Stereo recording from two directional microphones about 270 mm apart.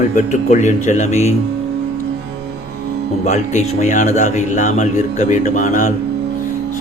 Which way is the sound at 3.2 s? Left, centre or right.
Left.